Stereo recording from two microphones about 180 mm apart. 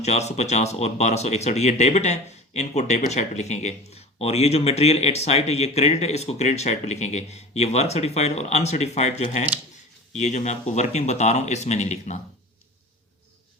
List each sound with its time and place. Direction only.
0.0 s speech: 35° left (ahead or behind)